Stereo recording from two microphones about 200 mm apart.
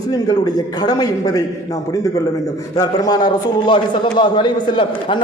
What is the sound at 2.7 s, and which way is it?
A man's voice, 20° left (ahead or behind).